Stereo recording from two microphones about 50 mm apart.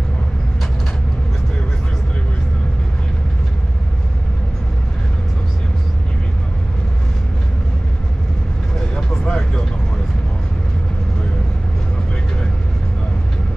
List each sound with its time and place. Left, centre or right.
8.9 s vehicle: centre